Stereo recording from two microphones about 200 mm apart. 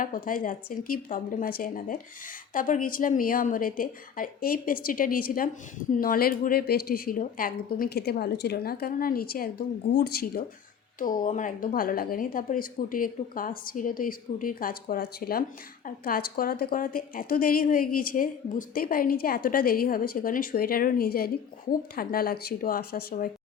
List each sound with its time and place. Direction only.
0.0 s a woman's voice: 45° left (ahead or behind)